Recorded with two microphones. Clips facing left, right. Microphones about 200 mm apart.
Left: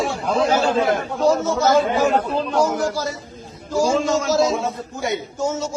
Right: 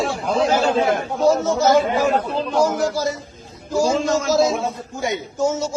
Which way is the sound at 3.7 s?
15° right (ahead or behind).